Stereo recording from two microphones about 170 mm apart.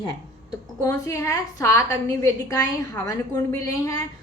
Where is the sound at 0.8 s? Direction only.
20° left (ahead or behind).